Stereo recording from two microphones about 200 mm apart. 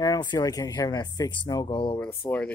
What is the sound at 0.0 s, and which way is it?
Speech, 20° left (ahead or behind).